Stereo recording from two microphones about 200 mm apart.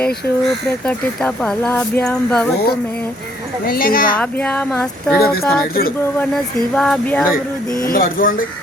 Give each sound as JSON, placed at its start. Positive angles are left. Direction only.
{"t": 0.4, "sound": "speech", "side_deg": 5}
{"t": 3.7, "sound": "speech", "side_deg": 45}
{"t": 4.2, "sound": "speech", "side_deg": 5}
{"t": 5.2, "sound": "speech", "side_deg": 50}
{"t": 6.7, "sound": "speech", "side_deg": 5}
{"t": 7.8, "sound": "speech", "side_deg": 45}